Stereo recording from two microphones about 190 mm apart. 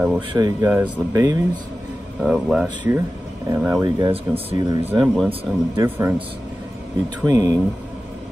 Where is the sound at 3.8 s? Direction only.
30° right (ahead or behind).